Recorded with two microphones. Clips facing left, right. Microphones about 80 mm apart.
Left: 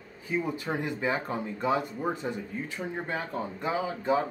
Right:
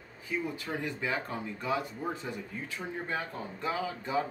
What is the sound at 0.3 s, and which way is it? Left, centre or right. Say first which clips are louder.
Speech: left 4 dB; left.